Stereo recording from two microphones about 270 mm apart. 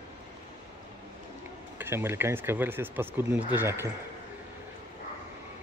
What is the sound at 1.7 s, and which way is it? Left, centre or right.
Speech, centre.